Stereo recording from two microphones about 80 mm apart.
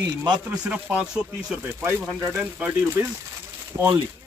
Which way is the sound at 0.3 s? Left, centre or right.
Centre.